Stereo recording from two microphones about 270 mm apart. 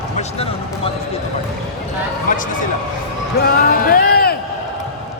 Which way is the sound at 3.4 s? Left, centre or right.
Left.